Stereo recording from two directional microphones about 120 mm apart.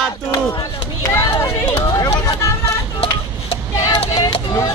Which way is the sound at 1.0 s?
25° left (ahead or behind).